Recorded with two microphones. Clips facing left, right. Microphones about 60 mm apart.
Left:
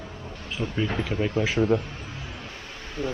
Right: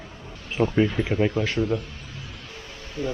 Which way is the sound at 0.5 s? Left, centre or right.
Right.